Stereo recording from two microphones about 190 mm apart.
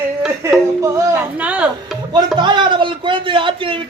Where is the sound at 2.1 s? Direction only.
25° right (ahead or behind).